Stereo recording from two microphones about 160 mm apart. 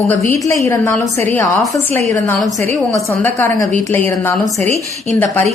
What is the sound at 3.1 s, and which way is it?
A woman's voice, 15° left (ahead or behind).